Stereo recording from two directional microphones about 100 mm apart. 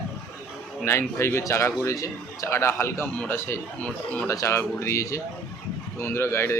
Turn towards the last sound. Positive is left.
turn(degrees=25)  # may be behind; listen again after turning